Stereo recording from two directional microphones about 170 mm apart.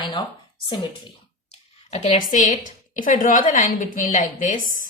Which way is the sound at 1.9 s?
40° left (ahead or behind).